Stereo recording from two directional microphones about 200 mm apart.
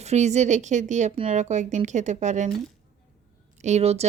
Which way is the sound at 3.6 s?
35° right (ahead or behind).